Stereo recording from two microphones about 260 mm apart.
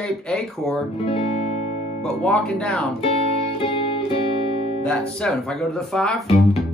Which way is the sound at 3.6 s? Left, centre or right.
Left.